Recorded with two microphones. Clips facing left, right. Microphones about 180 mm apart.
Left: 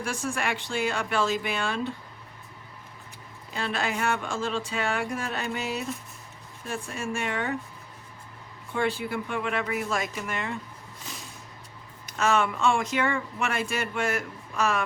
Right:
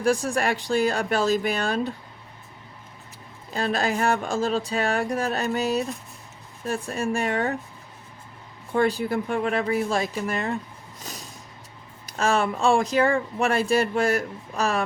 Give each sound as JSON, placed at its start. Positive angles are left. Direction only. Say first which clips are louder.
{"t": 0.0, "sound": "speech", "louder": "right 8 dB", "side_deg": -35}
{"t": 3.5, "sound": "speech", "louder": "right 5 dB", "side_deg": -40}
{"t": 8.7, "sound": "speech", "louder": "right 6 dB", "side_deg": -40}
{"t": 11.1, "sound": "a sound", "louder": "right 3 dB", "side_deg": -40}
{"t": 12.0, "sound": "speech", "louder": "right 2 dB", "side_deg": -35}